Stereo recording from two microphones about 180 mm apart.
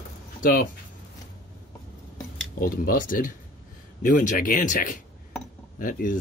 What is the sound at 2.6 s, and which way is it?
Speech, 50° left (ahead or behind).